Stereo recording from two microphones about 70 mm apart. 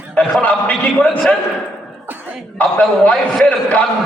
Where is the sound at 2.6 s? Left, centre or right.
Left.